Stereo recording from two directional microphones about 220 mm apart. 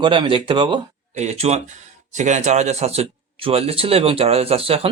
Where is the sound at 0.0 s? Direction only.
20° right (ahead or behind).